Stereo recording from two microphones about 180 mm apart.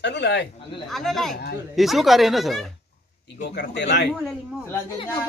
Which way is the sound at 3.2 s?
70° left (ahead or behind).